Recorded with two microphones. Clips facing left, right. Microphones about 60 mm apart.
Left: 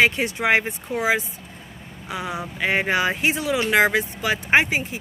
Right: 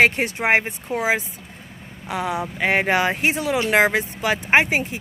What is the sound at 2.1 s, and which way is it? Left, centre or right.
Speech, right.